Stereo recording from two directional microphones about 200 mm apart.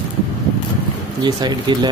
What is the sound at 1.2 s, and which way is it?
Speech, 20° right (ahead or behind).